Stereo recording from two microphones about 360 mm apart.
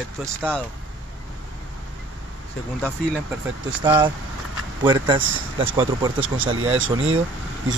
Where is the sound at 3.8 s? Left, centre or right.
Centre.